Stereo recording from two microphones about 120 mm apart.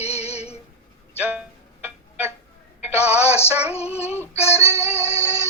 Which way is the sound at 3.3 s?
60° left (ahead or behind).